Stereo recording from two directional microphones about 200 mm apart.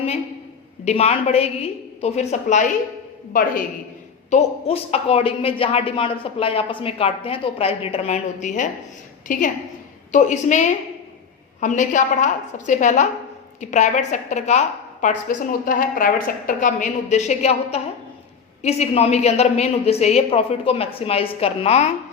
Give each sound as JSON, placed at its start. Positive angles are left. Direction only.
{"t": 0.9, "sound": "a woman's voice", "side_deg": 30}
{"t": 4.3, "sound": "a woman's voice", "side_deg": 35}